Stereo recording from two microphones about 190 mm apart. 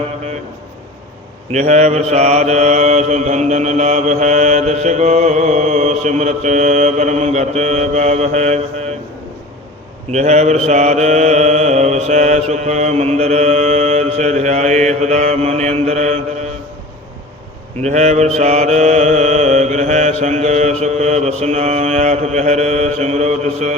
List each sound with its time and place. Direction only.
1.5 s mantra: 35° right (ahead or behind)
10.1 s mantra: 35° right (ahead or behind)
17.8 s mantra: 35° right (ahead or behind)